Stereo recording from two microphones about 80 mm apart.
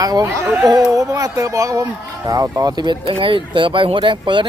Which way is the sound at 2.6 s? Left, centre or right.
Right.